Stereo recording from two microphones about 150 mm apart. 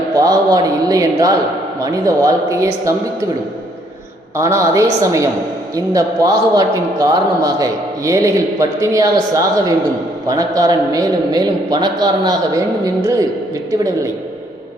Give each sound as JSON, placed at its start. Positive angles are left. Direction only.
{"t": 0.2, "sound": "a man's voice", "side_deg": -25}
{"t": 4.4, "sound": "a man's voice", "side_deg": -20}